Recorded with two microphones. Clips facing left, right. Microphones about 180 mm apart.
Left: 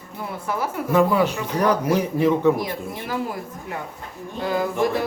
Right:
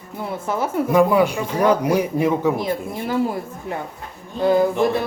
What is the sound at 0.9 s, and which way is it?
A man's voice, 15° right (ahead or behind).